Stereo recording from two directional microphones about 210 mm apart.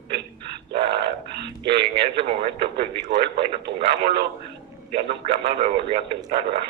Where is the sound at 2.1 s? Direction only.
25° right (ahead or behind).